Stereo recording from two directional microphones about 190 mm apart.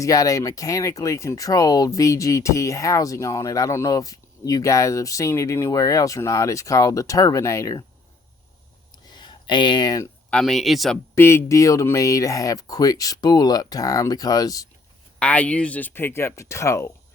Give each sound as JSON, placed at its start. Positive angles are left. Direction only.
{"t": 0.0, "sound": "speech", "side_deg": 15}
{"t": 9.0, "sound": "a sound", "side_deg": 25}
{"t": 10.2, "sound": "speech", "side_deg": 5}
{"t": 11.1, "sound": "speech", "side_deg": 15}
{"t": 15.2, "sound": "speech", "side_deg": 5}